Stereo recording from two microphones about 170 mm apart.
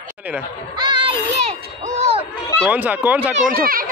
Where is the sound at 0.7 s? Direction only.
25° right (ahead or behind).